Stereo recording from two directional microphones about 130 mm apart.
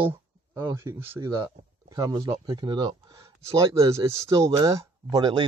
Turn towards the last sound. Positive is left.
turn(degrees=-35)  # may be behind; listen again after turning